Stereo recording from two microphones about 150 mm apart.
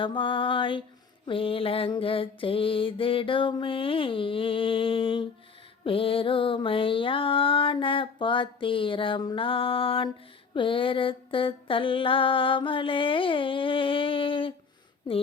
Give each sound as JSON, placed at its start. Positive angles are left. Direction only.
{"t": 0.0, "sound": "mantra", "side_deg": 35}